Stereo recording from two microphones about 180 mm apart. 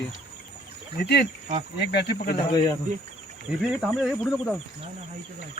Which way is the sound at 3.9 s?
Centre (ahead or behind).